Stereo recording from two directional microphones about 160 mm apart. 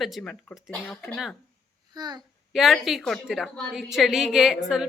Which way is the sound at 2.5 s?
Centre (ahead or behind).